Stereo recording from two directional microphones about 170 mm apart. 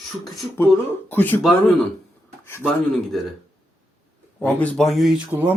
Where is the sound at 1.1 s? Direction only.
10° left (ahead or behind).